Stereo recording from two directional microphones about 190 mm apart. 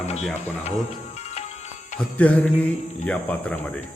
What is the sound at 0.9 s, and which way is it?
Music, 35° left (ahead or behind).